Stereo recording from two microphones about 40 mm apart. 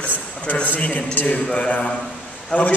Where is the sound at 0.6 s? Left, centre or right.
Left.